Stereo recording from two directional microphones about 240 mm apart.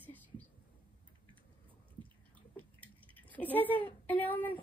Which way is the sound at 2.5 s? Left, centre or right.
Centre.